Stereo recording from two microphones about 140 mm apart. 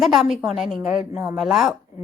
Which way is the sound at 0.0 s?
Centre (ahead or behind).